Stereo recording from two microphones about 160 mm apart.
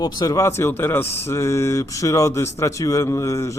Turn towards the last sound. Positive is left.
turn(degrees=20)  # may be behind; listen again after turning